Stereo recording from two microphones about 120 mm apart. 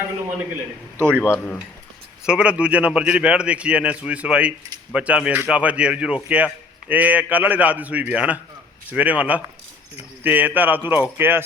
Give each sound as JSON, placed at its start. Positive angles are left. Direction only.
{"t": 0.9, "sound": "a man's voice", "side_deg": -20}
{"t": 1.2, "sound": "speech", "side_deg": 15}
{"t": 2.2, "sound": "a man's voice", "side_deg": -10}